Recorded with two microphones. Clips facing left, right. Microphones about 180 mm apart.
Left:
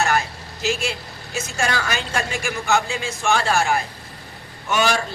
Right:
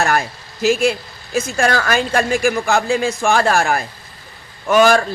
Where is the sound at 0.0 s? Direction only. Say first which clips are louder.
Right 3 dB; 55° right (ahead or behind).